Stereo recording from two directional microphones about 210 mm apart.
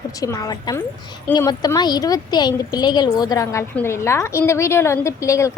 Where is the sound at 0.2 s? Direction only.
15° left (ahead or behind).